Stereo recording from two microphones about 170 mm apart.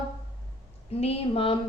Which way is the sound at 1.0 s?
35° left (ahead or behind).